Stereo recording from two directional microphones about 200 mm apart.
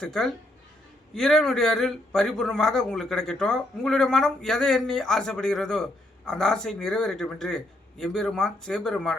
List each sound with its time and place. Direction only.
0.0 s a man's voice: 5° left (ahead or behind)